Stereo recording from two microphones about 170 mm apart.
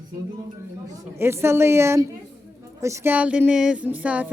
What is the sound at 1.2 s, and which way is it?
Speech, 15° right (ahead or behind).